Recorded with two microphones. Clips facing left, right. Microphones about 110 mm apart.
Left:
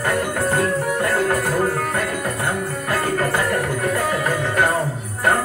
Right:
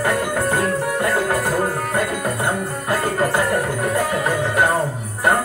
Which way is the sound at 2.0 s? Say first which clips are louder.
Right 2 dB; 20° right (ahead or behind).